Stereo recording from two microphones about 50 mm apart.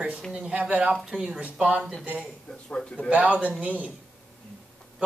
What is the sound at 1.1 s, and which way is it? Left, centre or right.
Speech, centre.